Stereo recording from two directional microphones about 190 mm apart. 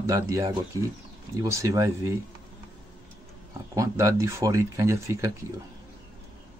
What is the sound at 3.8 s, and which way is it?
Speech, 15° right (ahead or behind).